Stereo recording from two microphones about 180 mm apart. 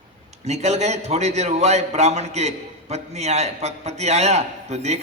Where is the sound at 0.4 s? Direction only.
40° right (ahead or behind).